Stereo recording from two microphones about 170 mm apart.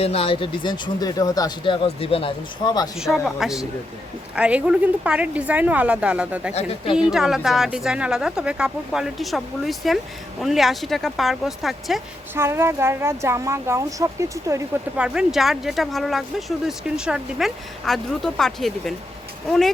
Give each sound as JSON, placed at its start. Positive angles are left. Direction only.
{"t": 0.0, "sound": "speech", "side_deg": 35}
{"t": 3.0, "sound": "a woman's voice", "side_deg": 0}
{"t": 6.5, "sound": "speech", "side_deg": 35}
{"t": 6.9, "sound": "speech", "side_deg": -5}
{"t": 12.3, "sound": "a woman's voice", "side_deg": -15}
{"t": 14.9, "sound": "speech", "side_deg": -5}